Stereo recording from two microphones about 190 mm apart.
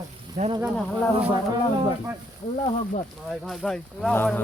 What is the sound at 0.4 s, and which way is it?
Speech, 45° right (ahead or behind).